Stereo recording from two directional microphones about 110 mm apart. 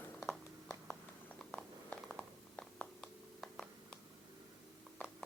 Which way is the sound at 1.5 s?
5° left (ahead or behind).